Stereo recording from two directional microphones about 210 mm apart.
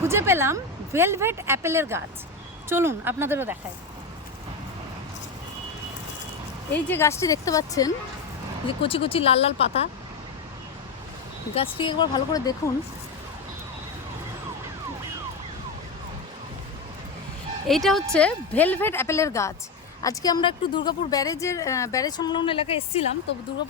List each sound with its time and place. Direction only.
0.0 s speech: 10° right (ahead or behind)
6.8 s a woman's voice: 10° left (ahead or behind); by 9.8 s 30° left (ahead or behind)
11.5 s a woman's voice: 25° left (ahead or behind)
17.7 s a woman's voice: centre (ahead or behind); by 23.1 s 30° left (ahead or behind)